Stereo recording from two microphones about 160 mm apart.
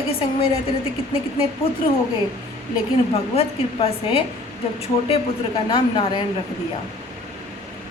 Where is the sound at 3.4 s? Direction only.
35° left (ahead or behind).